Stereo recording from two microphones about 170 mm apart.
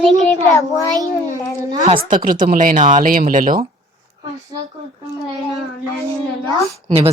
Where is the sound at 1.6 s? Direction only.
20° right (ahead or behind).